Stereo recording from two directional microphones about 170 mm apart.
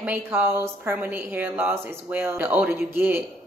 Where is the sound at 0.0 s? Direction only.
10° right (ahead or behind).